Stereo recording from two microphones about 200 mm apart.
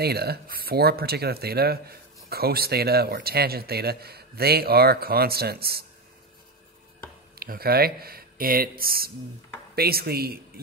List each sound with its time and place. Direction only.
0.0 s speech: 50° right (ahead or behind)
7.3 s speech: 50° right (ahead or behind)